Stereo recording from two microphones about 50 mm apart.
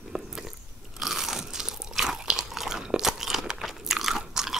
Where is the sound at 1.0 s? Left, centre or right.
Centre.